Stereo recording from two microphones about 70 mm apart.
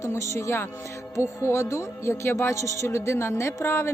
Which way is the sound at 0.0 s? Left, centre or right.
Left.